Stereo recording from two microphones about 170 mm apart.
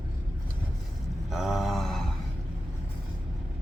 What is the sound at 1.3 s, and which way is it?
Mantra, centre (ahead or behind).